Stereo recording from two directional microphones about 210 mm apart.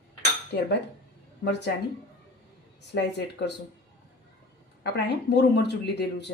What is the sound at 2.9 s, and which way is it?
Speech, 55° left (ahead or behind).